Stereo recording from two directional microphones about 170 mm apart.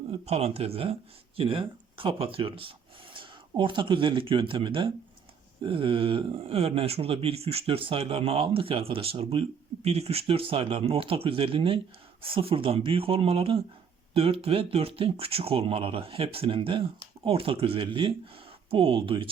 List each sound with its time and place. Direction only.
0.1 s speech: 35° right (ahead or behind)